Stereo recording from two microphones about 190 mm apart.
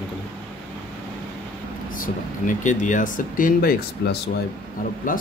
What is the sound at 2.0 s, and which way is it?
Speech, 40° left (ahead or behind).